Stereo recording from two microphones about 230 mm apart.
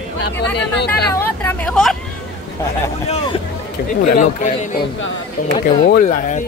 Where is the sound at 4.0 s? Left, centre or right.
Left.